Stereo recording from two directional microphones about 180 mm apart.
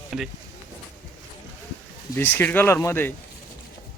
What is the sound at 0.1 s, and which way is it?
Speech, centre (ahead or behind).